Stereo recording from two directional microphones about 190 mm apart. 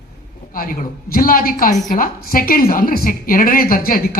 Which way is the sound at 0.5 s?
50° left (ahead or behind).